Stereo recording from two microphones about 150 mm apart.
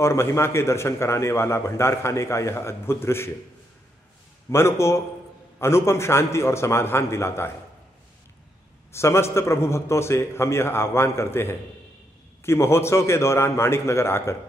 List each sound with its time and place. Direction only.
0.0 s a man's voice: 20° left (ahead or behind)
4.5 s a man's voice: 20° left (ahead or behind)
8.9 s a man's voice: 20° left (ahead or behind)